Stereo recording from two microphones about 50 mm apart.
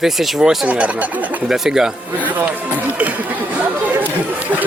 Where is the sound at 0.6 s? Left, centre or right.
Right.